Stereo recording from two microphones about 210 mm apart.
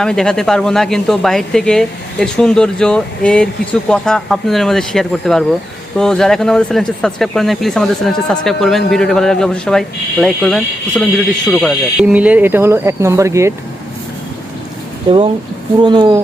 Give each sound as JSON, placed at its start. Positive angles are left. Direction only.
{"t": 0.0, "sound": "speech", "side_deg": 5}
{"t": 15.8, "sound": "speech", "side_deg": -20}